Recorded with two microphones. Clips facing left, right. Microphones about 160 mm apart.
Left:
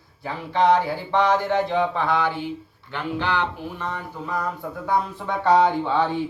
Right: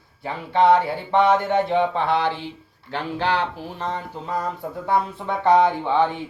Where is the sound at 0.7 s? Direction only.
25° right (ahead or behind).